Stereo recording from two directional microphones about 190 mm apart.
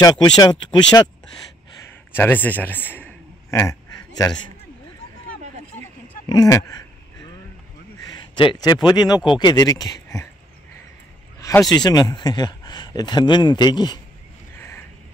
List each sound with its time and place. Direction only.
0.0 s speech: 20° left (ahead or behind)
2.1 s a man's voice: 10° left (ahead or behind)
5.8 s a sound: 20° left (ahead or behind)
8.4 s speech: 25° left (ahead or behind)
11.3 s a sound: 15° left (ahead or behind)
11.7 s speech: 20° left (ahead or behind)